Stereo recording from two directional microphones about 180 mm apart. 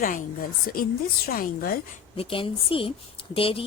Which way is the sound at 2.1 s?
30° left (ahead or behind).